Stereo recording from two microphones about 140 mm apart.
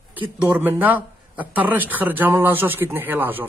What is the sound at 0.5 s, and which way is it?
Speech, 15° right (ahead or behind).